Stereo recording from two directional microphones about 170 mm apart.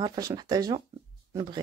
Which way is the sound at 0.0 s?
20° right (ahead or behind).